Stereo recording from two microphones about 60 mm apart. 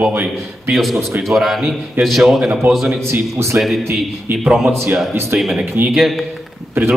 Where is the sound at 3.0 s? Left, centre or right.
Right.